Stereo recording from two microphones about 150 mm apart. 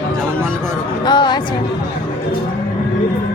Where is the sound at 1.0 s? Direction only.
30° left (ahead or behind).